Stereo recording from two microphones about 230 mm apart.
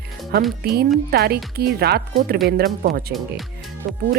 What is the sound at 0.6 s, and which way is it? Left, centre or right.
A woman's voice, right.